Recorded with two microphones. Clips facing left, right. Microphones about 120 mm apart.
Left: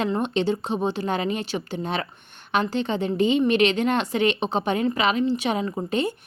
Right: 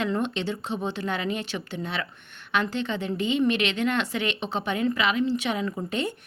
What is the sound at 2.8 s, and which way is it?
Speech, 20° left (ahead or behind).